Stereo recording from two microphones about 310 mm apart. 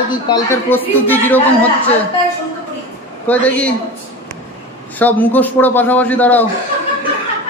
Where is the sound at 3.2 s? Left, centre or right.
Centre.